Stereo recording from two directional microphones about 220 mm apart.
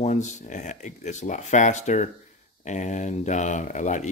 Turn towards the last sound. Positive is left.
turn(degrees=35)  # may be behind; listen again after turning